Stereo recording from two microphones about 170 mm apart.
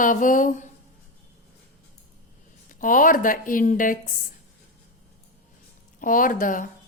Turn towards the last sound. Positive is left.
turn(degrees=50)  # may be behind; listen again after turning